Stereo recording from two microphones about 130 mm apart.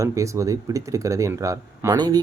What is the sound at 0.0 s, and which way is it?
Speech, 25° right (ahead or behind).